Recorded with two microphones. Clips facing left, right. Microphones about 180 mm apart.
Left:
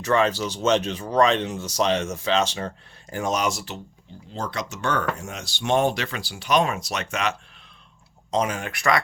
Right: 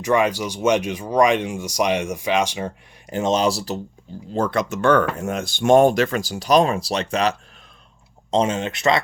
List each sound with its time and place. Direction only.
0.0 s speech: 15° right (ahead or behind)
3.2 s speech: 25° right (ahead or behind)
4.4 s speech: 55° right (ahead or behind); by 9.0 s 20° right (ahead or behind)